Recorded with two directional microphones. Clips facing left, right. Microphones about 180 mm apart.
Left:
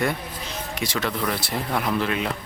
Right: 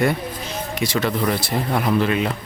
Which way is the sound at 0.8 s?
Centre (ahead or behind).